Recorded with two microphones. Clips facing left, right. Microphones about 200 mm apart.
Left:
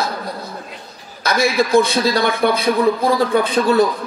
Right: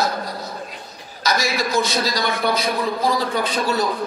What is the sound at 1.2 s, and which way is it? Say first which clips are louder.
A man's voice: left 5 dB; 55° left (ahead or behind).